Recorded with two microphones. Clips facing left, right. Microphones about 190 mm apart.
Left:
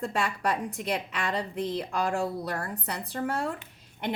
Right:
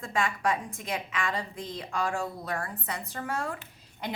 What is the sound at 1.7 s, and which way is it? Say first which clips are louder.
A woman's voice: left 1 dB; 35° left (ahead or behind).